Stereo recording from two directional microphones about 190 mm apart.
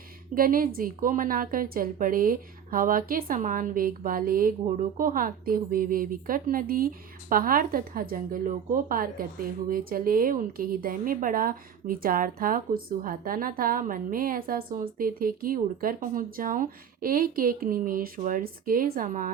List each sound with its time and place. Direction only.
0.3 s a woman's voice: 50° right (ahead or behind)